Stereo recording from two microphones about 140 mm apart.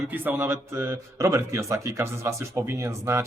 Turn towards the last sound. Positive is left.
turn(degrees=-20)  # may be behind; listen again after turning